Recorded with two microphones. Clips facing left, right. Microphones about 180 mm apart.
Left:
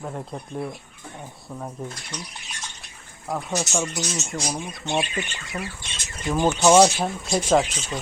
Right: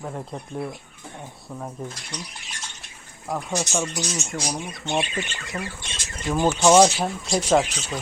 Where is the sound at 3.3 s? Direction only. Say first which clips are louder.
Even; centre (ahead or behind).